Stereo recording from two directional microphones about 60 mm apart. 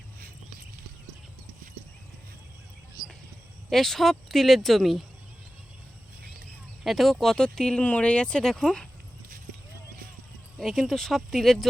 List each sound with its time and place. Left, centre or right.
3.7 s speech: centre
6.8 s speech: centre
7.8 s speech: left
10.6 s speech: centre